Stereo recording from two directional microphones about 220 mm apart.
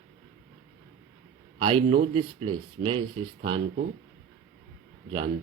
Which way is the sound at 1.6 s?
25° right (ahead or behind).